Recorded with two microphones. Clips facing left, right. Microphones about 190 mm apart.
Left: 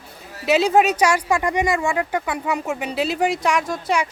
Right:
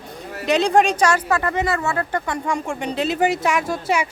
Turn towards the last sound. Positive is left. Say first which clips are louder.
# right 1 dB
turn(degrees=-5)  # may be behind; listen again after turning